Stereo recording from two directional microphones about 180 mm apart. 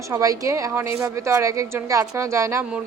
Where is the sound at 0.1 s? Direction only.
20° right (ahead or behind).